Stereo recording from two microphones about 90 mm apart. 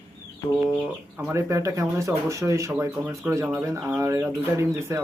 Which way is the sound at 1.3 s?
35° right (ahead or behind).